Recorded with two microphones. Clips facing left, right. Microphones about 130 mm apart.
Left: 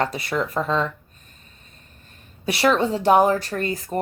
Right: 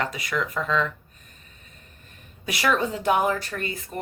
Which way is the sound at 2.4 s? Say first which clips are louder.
Left 5 dB; 30° left (ahead or behind).